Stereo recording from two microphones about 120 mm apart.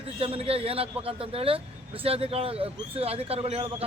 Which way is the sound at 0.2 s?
50° right (ahead or behind).